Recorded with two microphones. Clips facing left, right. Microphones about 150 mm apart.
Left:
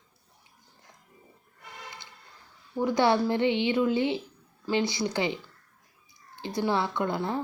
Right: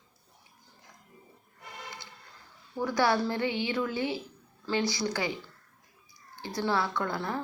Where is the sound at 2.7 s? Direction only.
20° left (ahead or behind).